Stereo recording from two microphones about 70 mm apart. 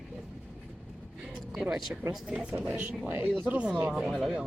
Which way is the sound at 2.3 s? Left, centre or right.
Centre.